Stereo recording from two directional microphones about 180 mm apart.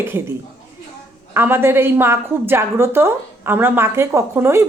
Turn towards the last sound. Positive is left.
turn(degrees=-15)  # may be behind; listen again after turning